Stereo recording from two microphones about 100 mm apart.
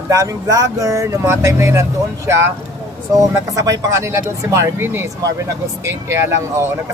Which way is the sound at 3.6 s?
35° right (ahead or behind).